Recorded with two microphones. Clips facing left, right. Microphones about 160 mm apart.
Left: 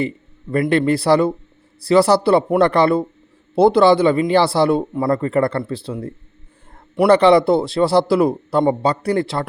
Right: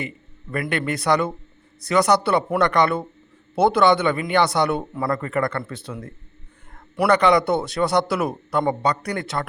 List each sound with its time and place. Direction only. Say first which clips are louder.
0.5 s a man's voice: left 9 dB; 30° left (ahead or behind)